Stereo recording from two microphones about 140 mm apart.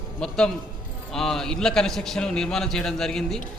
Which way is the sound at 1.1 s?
5° left (ahead or behind).